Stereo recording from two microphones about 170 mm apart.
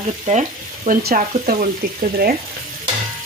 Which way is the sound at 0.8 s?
60° right (ahead or behind).